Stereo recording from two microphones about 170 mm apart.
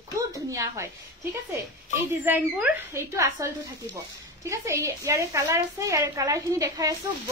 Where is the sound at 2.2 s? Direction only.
10° right (ahead or behind).